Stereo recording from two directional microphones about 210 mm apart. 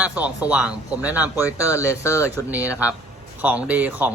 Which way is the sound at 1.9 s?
15° left (ahead or behind).